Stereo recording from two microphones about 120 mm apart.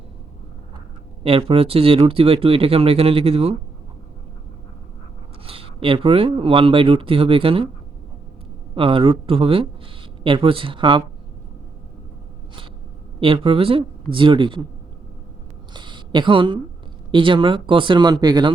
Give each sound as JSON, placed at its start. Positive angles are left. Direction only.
{"t": 1.2, "sound": "speech", "side_deg": -50}
{"t": 5.5, "sound": "speech", "side_deg": -50}
{"t": 8.7, "sound": "speech", "side_deg": -50}
{"t": 13.1, "sound": "speech", "side_deg": -50}
{"t": 15.7, "sound": "a sound", "side_deg": -40}
{"t": 17.1, "sound": "speech", "side_deg": -45}